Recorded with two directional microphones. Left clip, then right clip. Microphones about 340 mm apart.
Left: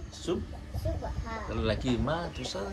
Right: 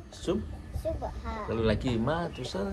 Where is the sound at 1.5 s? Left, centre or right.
Right.